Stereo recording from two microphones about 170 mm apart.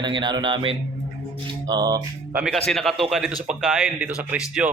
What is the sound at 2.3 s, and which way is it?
Speech, 5° right (ahead or behind).